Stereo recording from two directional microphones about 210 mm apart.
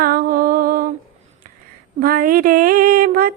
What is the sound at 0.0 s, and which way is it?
Mantra, 45° right (ahead or behind).